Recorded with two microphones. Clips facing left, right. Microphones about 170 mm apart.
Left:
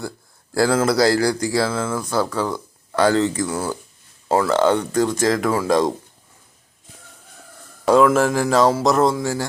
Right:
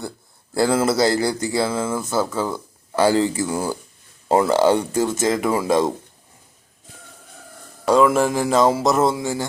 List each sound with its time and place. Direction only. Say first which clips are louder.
0.5 s speech: left 1 dB; centre (ahead or behind)
4.3 s speech: right 1 dB; 20° right (ahead or behind)
4.5 s speech: even; 10° right (ahead or behind)
8.0 s speech: left 1 dB; centre (ahead or behind)